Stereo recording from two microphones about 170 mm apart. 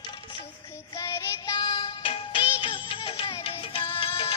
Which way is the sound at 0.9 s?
20° left (ahead or behind).